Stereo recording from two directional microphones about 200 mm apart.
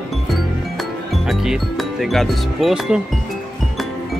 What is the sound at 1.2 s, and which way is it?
Speech, centre (ahead or behind).